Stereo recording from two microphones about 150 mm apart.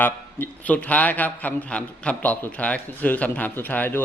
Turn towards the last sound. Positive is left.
turn(degrees=10)  # may be behind; listen again after turning